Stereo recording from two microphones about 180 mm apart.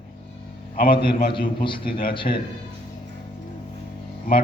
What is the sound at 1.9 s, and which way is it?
Speech, 55° left (ahead or behind).